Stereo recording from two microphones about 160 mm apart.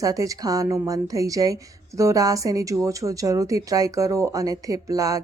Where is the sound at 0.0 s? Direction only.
20° right (ahead or behind).